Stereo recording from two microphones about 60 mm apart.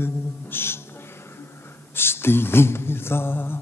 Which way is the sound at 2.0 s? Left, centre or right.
Left.